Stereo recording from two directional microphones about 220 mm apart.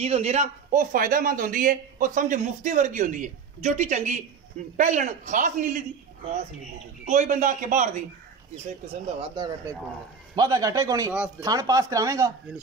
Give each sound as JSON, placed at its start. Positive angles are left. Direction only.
{"t": 0.0, "sound": "speech", "side_deg": -30}
{"t": 7.1, "sound": "speech", "side_deg": -35}
{"t": 9.2, "sound": "a man's voice", "side_deg": -20}